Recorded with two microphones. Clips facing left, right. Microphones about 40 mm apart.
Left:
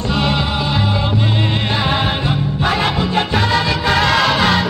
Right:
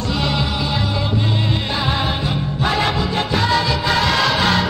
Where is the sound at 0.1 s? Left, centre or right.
Left.